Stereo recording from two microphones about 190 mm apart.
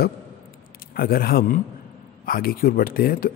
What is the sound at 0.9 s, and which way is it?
Speech, 50° left (ahead or behind).